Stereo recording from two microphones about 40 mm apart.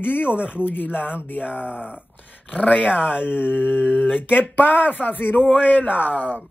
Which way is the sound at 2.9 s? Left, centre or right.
Centre.